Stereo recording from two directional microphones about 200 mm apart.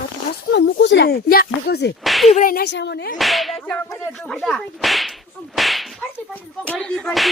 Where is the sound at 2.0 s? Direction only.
Centre (ahead or behind).